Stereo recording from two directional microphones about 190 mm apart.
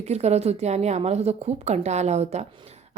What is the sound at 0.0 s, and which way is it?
A woman's voice, 35° right (ahead or behind).